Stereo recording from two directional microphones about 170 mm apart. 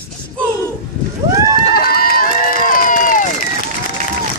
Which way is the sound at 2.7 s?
55° left (ahead or behind).